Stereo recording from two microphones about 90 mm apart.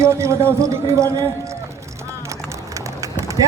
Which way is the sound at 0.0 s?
30° right (ahead or behind).